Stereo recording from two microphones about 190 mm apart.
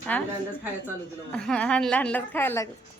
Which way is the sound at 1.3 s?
5° left (ahead or behind).